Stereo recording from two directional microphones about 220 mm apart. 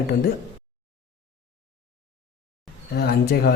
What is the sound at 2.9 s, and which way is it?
Speech, 45° left (ahead or behind).